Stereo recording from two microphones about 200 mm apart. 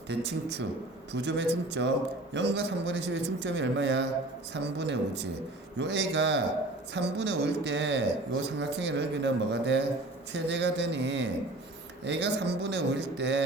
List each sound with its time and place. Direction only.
0.1 s a man's voice: 60° right (ahead or behind)